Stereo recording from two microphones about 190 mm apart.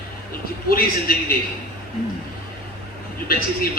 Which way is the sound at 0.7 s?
50° left (ahead or behind).